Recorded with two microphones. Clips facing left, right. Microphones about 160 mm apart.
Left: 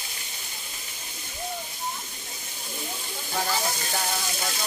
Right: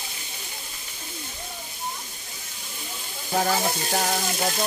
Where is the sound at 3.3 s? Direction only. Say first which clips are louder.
Right 5 dB; 45° right (ahead or behind).